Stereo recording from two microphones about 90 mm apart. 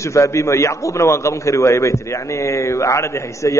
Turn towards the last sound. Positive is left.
turn(degrees=35)  # may be behind; listen again after turning